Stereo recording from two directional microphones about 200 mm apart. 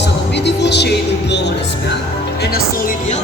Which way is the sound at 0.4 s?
60° left (ahead or behind).